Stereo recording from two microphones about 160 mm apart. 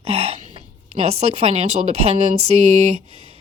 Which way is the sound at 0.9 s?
40° right (ahead or behind).